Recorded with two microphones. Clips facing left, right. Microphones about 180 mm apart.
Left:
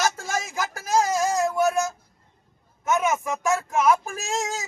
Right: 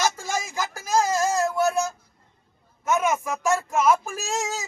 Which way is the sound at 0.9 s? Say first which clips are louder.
Even; centre (ahead or behind).